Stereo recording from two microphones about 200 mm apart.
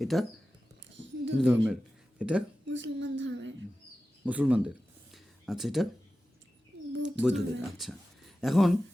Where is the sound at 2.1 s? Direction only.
5° right (ahead or behind).